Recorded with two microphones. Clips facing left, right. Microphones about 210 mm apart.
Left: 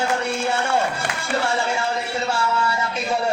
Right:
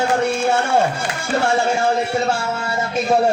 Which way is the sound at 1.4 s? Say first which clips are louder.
Right 8 dB; 50° right (ahead or behind).